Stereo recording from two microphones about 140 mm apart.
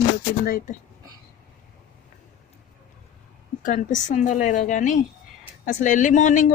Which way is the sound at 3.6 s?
70° left (ahead or behind).